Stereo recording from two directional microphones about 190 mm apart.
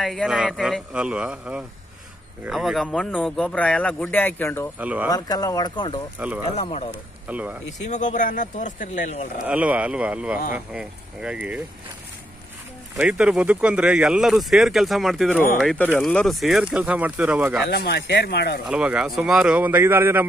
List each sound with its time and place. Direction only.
0.0 s speech: centre (ahead or behind)
4.7 s speech: 10° right (ahead or behind)
5.1 s speech: 20° left (ahead or behind)
6.1 s speech: 5° right (ahead or behind)
7.9 s speech: 40° left (ahead or behind)
9.5 s speech: 10° right (ahead or behind)
12.9 s speech: 5° right (ahead or behind)
17.6 s speech: 60° left (ahead or behind)
18.7 s speech: 5° right (ahead or behind)